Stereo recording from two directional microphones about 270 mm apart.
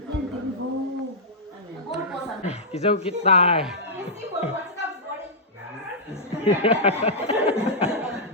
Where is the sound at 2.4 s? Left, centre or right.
Left.